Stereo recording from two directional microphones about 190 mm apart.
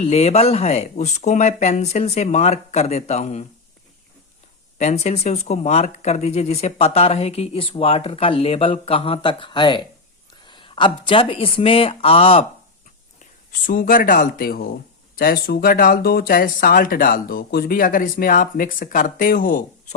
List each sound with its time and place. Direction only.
0.0 s speech: 35° left (ahead or behind)
4.8 s speech: 35° left (ahead or behind)
13.7 s speech: 45° left (ahead or behind)